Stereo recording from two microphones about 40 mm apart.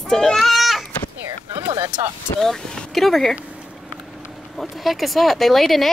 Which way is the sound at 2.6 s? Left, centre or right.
Centre.